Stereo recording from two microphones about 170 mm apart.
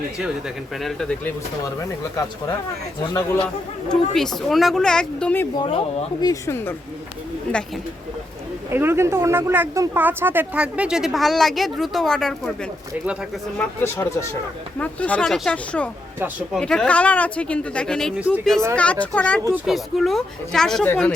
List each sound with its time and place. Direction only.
0.8 s speech: 5° left (ahead or behind)
1.8 s speech: 20° left (ahead or behind)
3.4 s speech: 5° left (ahead or behind)
5.5 s speech: 30° left (ahead or behind)
6.2 s speech: 15° left (ahead or behind)
8.7 s speech: 15° right (ahead or behind); by 12.3 s 5° left (ahead or behind)
13.6 s speech: 15° left (ahead or behind)